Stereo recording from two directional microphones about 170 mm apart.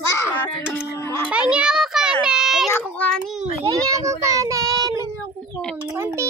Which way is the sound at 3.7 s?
20° right (ahead or behind).